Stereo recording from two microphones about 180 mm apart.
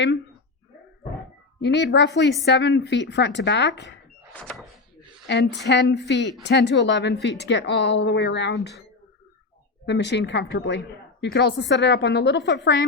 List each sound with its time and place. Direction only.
1.6 s a woman's voice: 70° left (ahead or behind)
4.4 s speech: 5° left (ahead or behind)
5.2 s a woman's voice: 75° left (ahead or behind)
9.8 s a woman's voice: 70° left (ahead or behind)